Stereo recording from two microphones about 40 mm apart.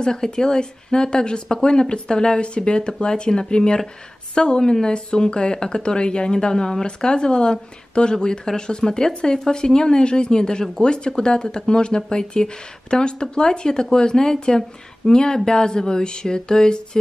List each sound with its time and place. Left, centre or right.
0.0 s a woman's voice: centre